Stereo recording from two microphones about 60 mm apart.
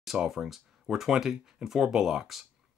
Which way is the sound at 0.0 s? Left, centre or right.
Centre.